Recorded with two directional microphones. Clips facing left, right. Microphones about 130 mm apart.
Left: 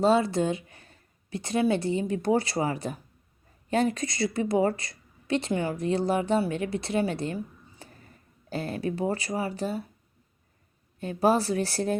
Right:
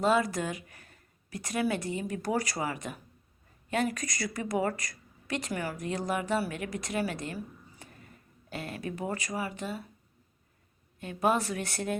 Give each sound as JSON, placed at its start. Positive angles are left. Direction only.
{"t": 0.0, "sound": "a woman's voice", "side_deg": 30}
{"t": 11.0, "sound": "speech", "side_deg": 35}